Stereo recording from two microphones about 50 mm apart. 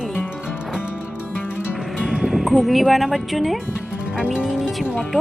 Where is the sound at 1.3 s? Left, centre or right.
Left.